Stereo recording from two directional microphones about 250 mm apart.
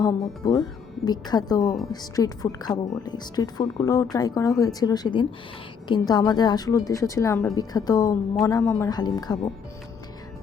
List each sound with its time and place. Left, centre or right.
0.0 s speech: centre